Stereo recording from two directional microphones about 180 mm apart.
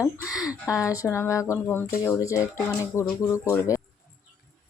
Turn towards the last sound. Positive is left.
turn(degrees=15)  # may be behind; listen again after turning